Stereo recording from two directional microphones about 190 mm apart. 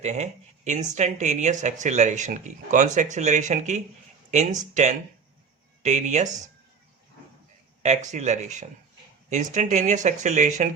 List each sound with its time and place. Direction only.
0.0 s speech: 35° right (ahead or behind)
7.8 s speech: 40° right (ahead or behind)